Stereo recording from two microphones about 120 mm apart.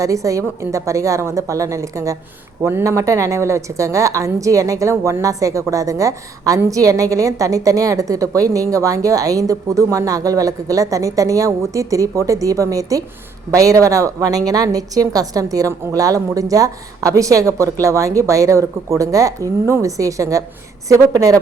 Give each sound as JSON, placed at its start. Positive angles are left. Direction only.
{"t": 0.0, "sound": "a woman's voice", "side_deg": -25}